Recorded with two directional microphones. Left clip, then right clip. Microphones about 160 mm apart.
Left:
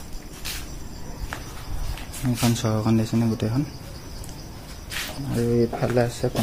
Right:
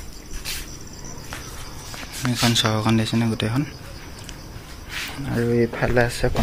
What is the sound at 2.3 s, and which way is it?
Speech, 5° left (ahead or behind).